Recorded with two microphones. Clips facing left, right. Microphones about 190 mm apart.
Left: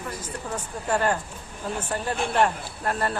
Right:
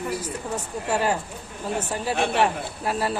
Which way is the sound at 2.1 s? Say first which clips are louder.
Right 4 dB; 70° right (ahead or behind).